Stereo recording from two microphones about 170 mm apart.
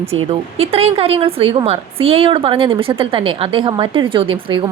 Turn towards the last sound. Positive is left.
turn(degrees=-30)  # may be behind; listen again after turning